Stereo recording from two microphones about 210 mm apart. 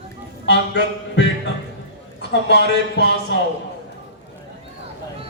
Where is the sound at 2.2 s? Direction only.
55° left (ahead or behind).